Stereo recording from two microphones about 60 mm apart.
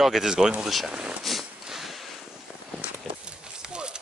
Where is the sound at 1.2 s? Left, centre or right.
Centre.